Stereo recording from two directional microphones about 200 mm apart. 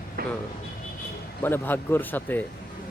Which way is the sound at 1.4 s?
10° left (ahead or behind).